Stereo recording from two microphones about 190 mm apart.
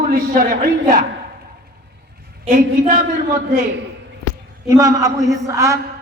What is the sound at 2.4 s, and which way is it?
A woman's voice, 40° right (ahead or behind).